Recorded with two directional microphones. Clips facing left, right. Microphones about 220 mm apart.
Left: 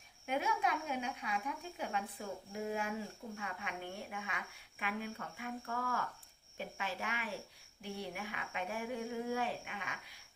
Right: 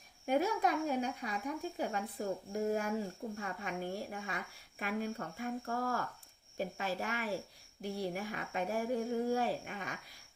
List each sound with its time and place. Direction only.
0.3 s a woman's voice: 40° right (ahead or behind)